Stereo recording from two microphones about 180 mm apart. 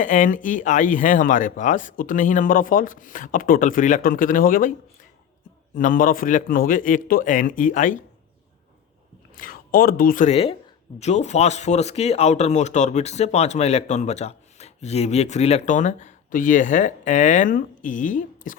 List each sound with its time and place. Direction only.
0.0 s speech: 45° left (ahead or behind)
5.7 s speech: 50° left (ahead or behind)
9.3 s speech: 50° left (ahead or behind)